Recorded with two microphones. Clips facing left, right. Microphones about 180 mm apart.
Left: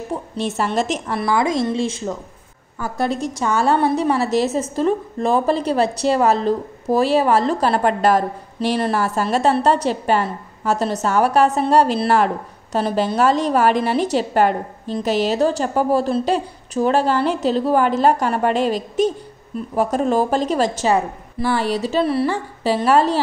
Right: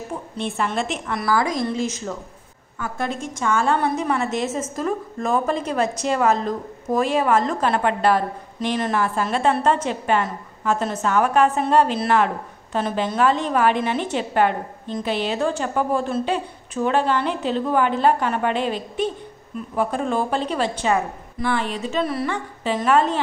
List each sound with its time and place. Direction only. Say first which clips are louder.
0.4 s a woman's voice: left 3 dB; 40° left (ahead or behind)